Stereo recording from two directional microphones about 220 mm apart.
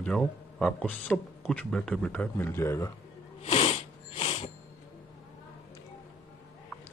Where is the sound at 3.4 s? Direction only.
30° left (ahead or behind).